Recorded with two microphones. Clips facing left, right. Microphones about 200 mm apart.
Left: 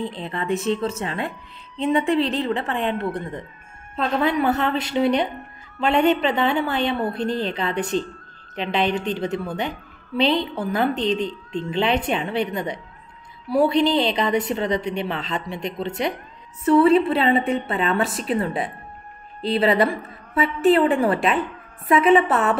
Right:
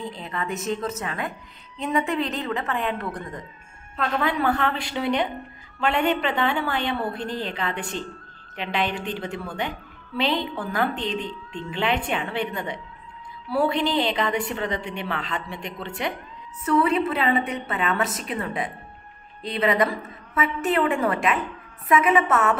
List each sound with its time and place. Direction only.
0.1 s a woman's voice: 30° left (ahead or behind)